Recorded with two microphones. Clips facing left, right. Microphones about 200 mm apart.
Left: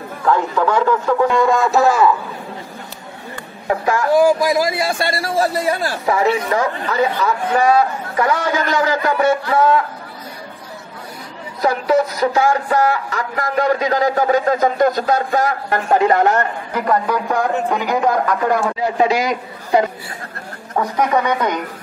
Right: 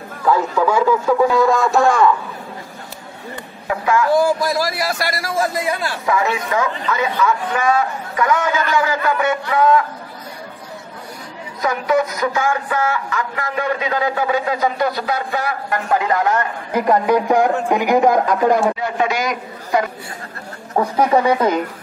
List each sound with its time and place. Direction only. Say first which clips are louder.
0.2 s a man's voice: even; 5° right (ahead or behind)
3.6 s a man's voice: even; 40° left (ahead or behind)
4.2 s a man's voice: left 3 dB; 10° left (ahead or behind); by 9.8 s 30° left (ahead or behind)
11.6 s a man's voice: left 2 dB; 35° left (ahead or behind)
16.7 s speech: right 4 dB; 15° right (ahead or behind)
18.8 s a man's voice: left 3 dB; 30° left (ahead or behind)
20.7 s speech: right 2 dB; 30° right (ahead or behind)